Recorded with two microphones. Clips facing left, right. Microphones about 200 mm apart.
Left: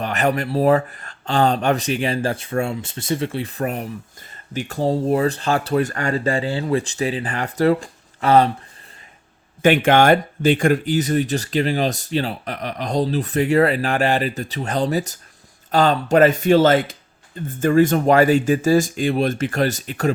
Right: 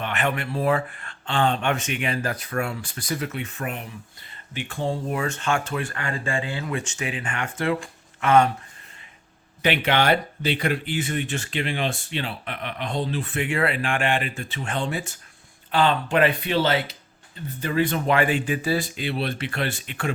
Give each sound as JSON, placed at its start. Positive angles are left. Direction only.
{"t": 0.0, "sound": "speech", "side_deg": 40}
{"t": 9.6, "sound": "speech", "side_deg": 45}